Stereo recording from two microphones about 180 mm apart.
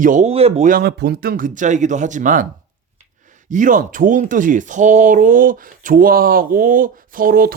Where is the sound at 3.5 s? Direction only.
45° right (ahead or behind).